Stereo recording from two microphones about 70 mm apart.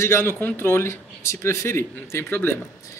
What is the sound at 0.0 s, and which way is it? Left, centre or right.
A man's voice, left.